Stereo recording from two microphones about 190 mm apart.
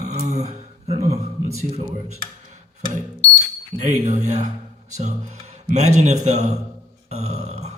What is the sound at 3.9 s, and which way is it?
Speech, 40° right (ahead or behind).